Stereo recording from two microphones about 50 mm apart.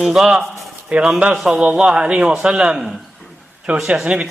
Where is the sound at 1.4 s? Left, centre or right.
Right.